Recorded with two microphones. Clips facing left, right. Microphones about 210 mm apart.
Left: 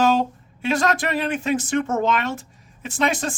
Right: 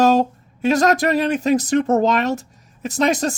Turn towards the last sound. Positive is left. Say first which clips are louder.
# right 5 dB
turn(degrees=-40)  # may be behind; listen again after turning